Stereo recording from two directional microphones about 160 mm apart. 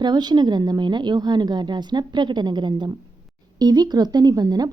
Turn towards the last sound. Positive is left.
turn(degrees=-25)  # may be behind; listen again after turning